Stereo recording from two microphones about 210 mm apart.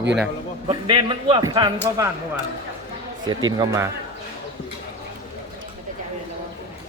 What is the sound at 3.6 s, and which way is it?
Speech, 15° right (ahead or behind).